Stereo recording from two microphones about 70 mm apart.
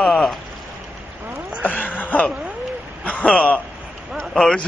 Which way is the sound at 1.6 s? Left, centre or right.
Left.